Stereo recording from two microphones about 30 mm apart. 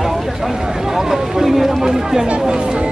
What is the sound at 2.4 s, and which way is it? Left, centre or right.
Speech, right.